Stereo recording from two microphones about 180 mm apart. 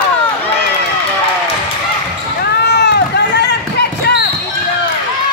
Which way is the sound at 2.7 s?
70° left (ahead or behind).